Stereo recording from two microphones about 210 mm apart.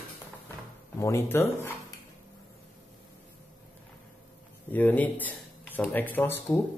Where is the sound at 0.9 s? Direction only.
15° left (ahead or behind).